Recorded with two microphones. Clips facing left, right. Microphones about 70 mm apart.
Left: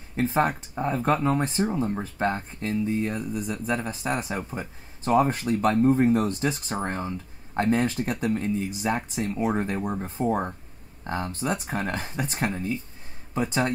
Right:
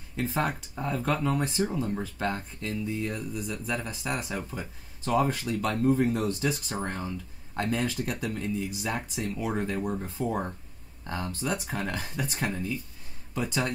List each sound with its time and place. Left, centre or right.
0.1 s speech: left
9.8 s speech: left